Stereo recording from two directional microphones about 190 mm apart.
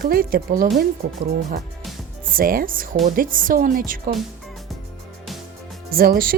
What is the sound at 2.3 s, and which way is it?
Speech, 50° right (ahead or behind).